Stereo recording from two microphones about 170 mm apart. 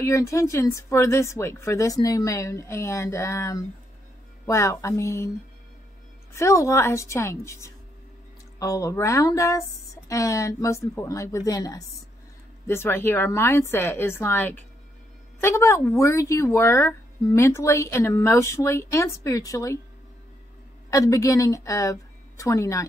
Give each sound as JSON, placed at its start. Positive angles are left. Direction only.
{"t": 0.0, "sound": "speech", "side_deg": 15}
{"t": 6.3, "sound": "speech", "side_deg": 15}
{"t": 20.9, "sound": "speech", "side_deg": 20}